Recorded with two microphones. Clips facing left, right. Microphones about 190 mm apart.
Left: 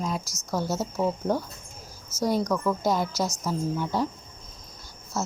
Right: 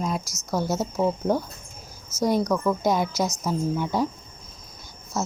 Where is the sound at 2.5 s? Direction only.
15° right (ahead or behind).